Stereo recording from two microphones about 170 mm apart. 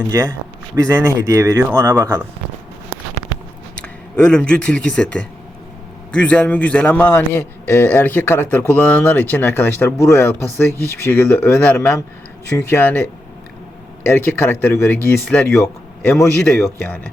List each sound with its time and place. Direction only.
0.9 s speech: 15° right (ahead or behind)
3.8 s a man's voice: 5° left (ahead or behind)